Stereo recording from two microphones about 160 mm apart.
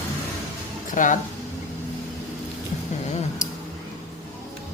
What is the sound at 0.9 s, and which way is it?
Speech, 55° left (ahead or behind).